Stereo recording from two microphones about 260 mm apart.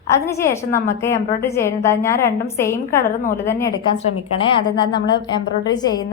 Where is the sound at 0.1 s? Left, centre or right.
Centre.